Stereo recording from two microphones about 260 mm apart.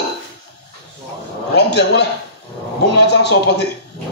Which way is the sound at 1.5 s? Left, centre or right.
Left.